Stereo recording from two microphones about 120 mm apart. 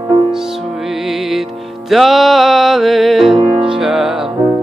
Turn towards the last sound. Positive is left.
turn(degrees=-5)  # may be behind; listen again after turning